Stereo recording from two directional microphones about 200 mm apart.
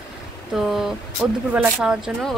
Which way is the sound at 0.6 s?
Centre (ahead or behind).